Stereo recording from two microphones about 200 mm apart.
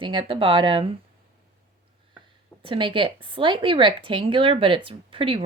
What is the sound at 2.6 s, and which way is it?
Speech, 25° right (ahead or behind).